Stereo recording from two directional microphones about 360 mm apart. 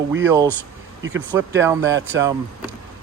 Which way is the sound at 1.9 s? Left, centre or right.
Right.